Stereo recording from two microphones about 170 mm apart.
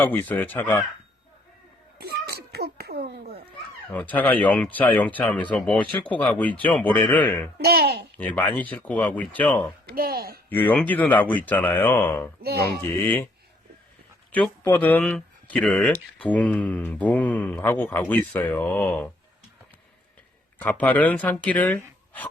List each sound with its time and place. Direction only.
0.0 s speech: 10° left (ahead or behind)
2.0 s a sound: 65° right (ahead or behind)
3.1 s speech: 70° right (ahead or behind)
3.9 s speech: 10° left (ahead or behind)
7.6 s a child's voice: 65° right (ahead or behind)
8.2 s speech: 10° left (ahead or behind)
9.8 s speech: 65° right (ahead or behind)
10.5 s speech: 10° left (ahead or behind)
14.3 s speech: 10° left (ahead or behind)
20.6 s speech: 10° left (ahead or behind)